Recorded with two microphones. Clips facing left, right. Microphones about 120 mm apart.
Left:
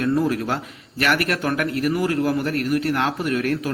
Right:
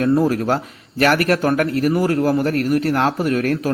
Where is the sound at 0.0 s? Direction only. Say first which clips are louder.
Right 4 dB; 40° right (ahead or behind).